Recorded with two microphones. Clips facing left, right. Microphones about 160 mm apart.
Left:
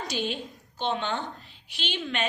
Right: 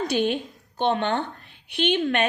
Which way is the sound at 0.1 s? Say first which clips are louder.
Right 8 dB; 55° right (ahead or behind).